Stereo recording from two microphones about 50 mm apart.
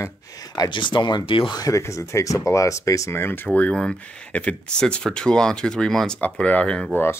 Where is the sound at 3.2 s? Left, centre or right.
Left.